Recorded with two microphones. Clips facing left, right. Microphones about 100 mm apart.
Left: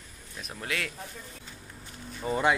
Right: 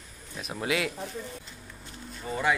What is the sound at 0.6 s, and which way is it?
Speech, 10° right (ahead or behind).